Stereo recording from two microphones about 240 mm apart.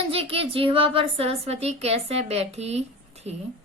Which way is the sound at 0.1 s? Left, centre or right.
Right.